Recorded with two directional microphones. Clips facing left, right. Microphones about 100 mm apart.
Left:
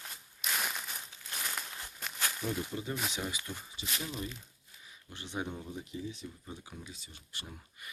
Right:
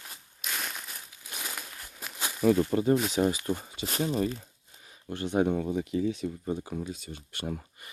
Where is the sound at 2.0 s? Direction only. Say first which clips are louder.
Right 1 dB; 10° right (ahead or behind).